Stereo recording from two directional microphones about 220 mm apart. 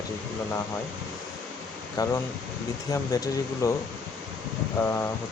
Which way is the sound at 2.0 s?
15° left (ahead or behind).